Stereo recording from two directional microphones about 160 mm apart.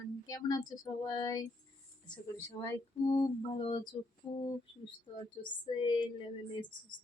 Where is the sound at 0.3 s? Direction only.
25° left (ahead or behind).